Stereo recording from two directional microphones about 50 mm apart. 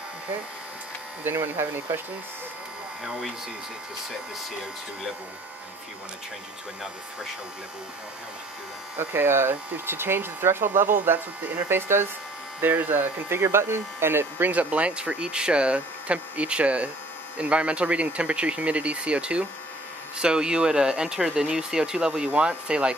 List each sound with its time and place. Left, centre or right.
1.2 s speech: right
8.9 s speech: right
14.4 s speech: right